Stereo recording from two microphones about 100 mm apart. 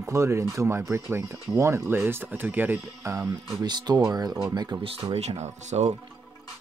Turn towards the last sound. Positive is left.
turn(degrees=-90)